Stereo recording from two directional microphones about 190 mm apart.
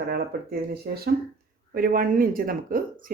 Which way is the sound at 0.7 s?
55° right (ahead or behind).